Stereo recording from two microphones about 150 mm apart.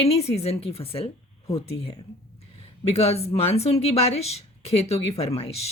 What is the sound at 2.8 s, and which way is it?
Speech, 45° left (ahead or behind).